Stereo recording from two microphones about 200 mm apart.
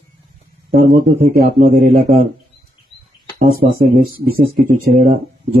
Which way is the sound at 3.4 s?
45° right (ahead or behind).